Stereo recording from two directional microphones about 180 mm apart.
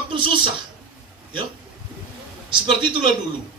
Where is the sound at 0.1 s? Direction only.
30° right (ahead or behind).